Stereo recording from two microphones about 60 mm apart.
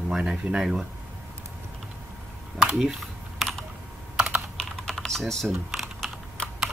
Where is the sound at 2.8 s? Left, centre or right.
Centre.